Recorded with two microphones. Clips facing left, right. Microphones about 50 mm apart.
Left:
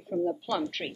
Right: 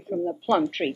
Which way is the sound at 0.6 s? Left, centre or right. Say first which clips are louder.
Right 8 dB; right.